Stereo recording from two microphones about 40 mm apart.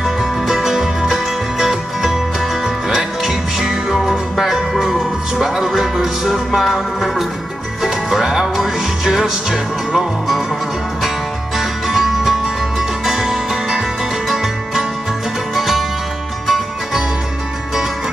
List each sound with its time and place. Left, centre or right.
0.0 s music: centre
11.5 s music: centre